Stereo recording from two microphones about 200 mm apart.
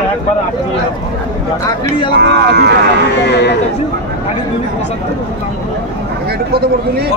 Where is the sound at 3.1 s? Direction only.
60° left (ahead or behind).